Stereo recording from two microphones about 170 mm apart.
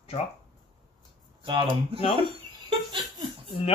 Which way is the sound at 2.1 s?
30° right (ahead or behind).